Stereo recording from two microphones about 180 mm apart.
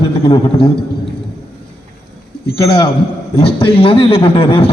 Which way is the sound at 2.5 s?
30° left (ahead or behind).